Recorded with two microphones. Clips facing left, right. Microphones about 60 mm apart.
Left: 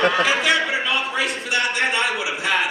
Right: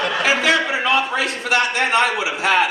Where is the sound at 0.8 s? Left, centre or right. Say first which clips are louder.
Right 4 dB; right.